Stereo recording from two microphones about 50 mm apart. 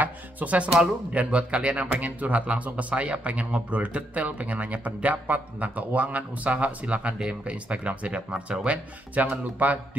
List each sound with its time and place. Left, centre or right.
0.0 s speech: right